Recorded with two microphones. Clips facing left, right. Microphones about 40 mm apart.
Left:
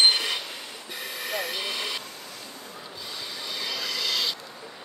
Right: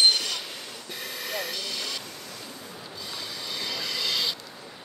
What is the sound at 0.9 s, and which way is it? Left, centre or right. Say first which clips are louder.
Train: left 2 dB; centre.